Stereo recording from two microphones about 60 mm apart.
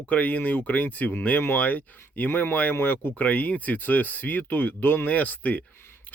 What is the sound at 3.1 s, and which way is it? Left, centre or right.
Speech, left.